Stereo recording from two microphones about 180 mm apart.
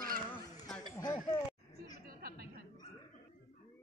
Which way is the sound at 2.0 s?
55° right (ahead or behind).